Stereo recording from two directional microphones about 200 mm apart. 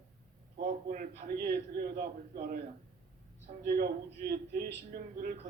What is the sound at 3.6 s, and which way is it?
A man's voice, 50° right (ahead or behind).